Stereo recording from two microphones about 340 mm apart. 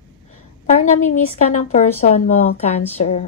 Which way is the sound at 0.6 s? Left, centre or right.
Centre.